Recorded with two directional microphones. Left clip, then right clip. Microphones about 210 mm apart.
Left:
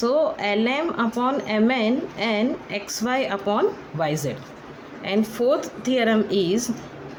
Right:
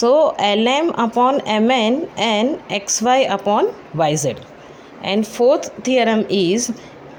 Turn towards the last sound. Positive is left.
turn(degrees=-25)  # may be behind; listen again after turning